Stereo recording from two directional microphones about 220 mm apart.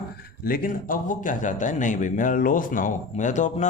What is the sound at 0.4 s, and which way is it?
Speech, 40° left (ahead or behind).